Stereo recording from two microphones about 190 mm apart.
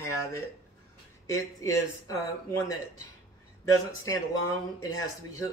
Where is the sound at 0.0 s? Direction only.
15° left (ahead or behind).